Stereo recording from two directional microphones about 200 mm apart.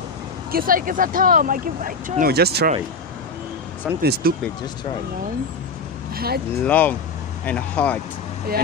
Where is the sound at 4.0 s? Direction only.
55° right (ahead or behind).